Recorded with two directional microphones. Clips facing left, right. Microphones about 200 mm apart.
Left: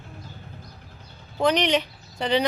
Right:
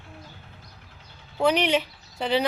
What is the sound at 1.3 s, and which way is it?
Speech, 5° right (ahead or behind).